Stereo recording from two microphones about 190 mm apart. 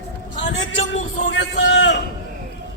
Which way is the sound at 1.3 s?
70° left (ahead or behind).